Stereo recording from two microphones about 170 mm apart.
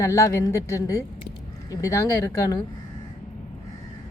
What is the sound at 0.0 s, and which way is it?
A woman's voice, 20° left (ahead or behind).